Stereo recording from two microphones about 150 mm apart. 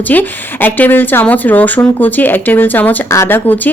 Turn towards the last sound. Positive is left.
turn(degrees=15)  # may be behind; listen again after turning